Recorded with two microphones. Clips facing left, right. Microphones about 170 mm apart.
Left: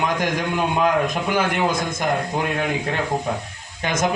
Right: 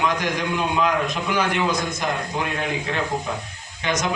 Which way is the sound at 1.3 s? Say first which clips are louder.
Even; 50° left (ahead or behind).